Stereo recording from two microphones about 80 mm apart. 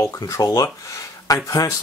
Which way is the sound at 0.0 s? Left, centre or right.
Left.